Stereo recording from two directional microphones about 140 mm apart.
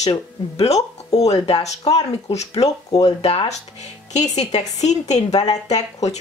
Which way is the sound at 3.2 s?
45° left (ahead or behind).